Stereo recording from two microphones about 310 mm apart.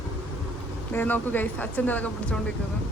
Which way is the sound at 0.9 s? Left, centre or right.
Centre.